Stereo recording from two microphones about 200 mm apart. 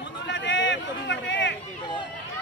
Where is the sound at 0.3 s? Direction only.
65° left (ahead or behind).